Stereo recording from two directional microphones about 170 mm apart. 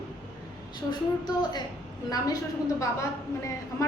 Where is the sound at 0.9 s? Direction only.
25° left (ahead or behind).